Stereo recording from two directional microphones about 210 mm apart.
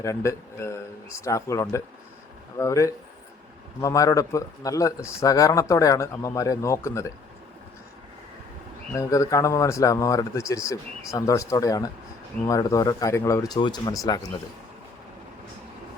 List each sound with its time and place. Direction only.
0.0 s speech: 15° left (ahead or behind)
8.9 s speech: 15° left (ahead or behind)